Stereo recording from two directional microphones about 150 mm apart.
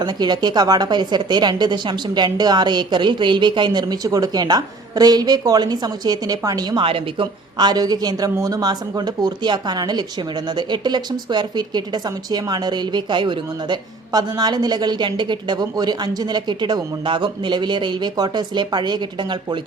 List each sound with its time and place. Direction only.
0.0 s a woman's voice: 30° right (ahead or behind)